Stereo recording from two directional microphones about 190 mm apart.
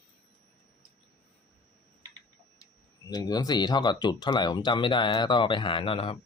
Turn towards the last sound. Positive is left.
turn(degrees=30)  # may be behind; listen again after turning